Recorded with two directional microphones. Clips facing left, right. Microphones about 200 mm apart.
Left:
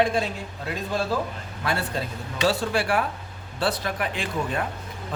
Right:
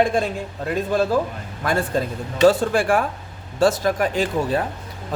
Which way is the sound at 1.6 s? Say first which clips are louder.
Right 6 dB; 50° right (ahead or behind).